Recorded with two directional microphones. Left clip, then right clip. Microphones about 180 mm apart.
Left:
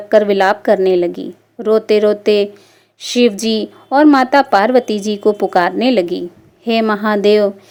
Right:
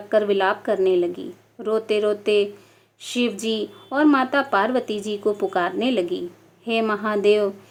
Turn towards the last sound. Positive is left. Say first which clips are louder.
# left 7 dB
turn(degrees=35)  # may be behind; listen again after turning